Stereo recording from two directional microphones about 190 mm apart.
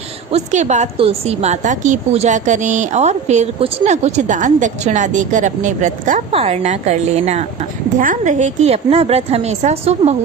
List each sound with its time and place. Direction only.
0.3 s a woman's voice: 35° right (ahead or behind)